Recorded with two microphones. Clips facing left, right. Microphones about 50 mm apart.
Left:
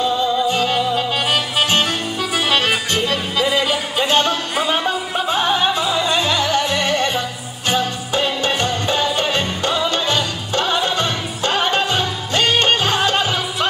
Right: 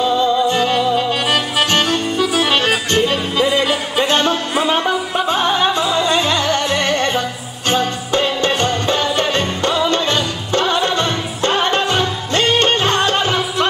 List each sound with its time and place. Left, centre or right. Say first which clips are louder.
0.0 s music: right 3 dB; centre